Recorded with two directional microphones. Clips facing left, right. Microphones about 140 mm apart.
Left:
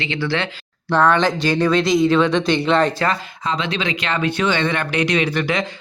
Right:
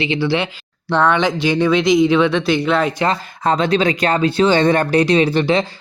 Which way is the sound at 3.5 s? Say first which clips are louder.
Right 7 dB; 45° right (ahead or behind).